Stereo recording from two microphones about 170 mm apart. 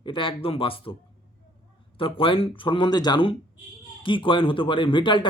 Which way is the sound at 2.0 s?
30° left (ahead or behind).